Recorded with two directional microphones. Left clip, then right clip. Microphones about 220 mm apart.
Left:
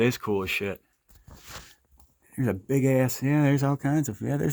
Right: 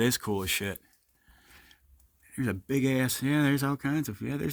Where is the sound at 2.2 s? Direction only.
5° right (ahead or behind).